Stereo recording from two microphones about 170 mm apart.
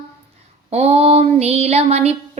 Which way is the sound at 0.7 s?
40° right (ahead or behind).